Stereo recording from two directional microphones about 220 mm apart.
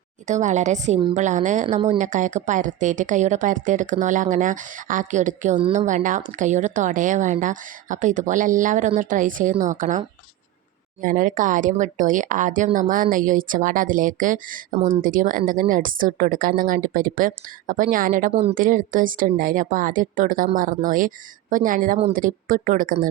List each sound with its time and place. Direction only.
0.3 s speech: 35° right (ahead or behind)
11.0 s speech: 35° right (ahead or behind)